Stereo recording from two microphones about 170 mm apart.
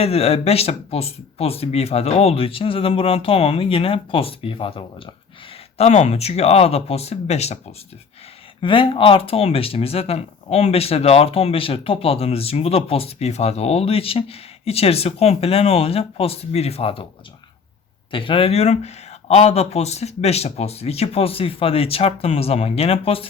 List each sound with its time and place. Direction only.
0.0 s speech: 35° left (ahead or behind)
8.6 s speech: 30° left (ahead or behind)
18.1 s speech: 30° left (ahead or behind)